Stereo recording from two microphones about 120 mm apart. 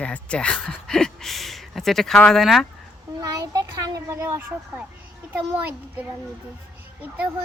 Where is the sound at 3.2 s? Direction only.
30° right (ahead or behind).